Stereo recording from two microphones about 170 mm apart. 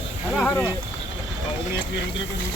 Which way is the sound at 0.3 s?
5° left (ahead or behind).